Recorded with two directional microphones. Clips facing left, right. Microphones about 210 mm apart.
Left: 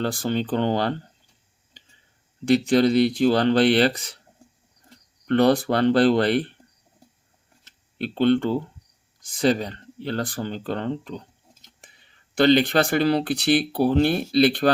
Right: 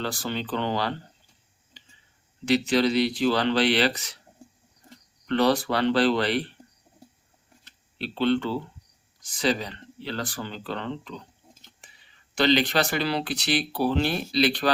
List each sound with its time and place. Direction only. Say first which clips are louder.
0.0 s speech: left 6 dB; 50° left (ahead or behind)
2.4 s speech: left 4 dB; 50° left (ahead or behind)
5.2 s speech: left 4 dB; 50° left (ahead or behind)
7.9 s speech: left 4 dB; 50° left (ahead or behind)